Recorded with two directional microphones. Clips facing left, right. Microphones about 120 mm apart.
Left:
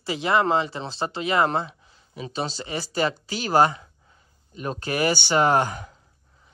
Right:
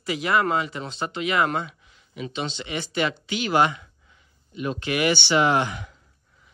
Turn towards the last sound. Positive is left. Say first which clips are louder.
# left 1 dB
turn(degrees=40)  # may be behind; listen again after turning